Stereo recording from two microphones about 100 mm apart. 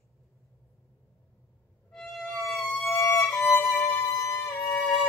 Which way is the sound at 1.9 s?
5° left (ahead or behind).